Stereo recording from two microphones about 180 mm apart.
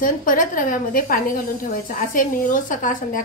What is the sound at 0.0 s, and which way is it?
A woman's voice, 50° left (ahead or behind).